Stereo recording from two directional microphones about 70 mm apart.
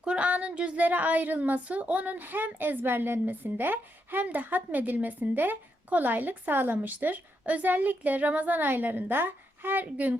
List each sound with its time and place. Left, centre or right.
0.0 s a woman's voice: centre